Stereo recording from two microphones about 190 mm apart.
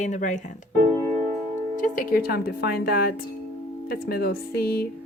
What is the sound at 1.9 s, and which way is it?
A woman's voice, 55° left (ahead or behind).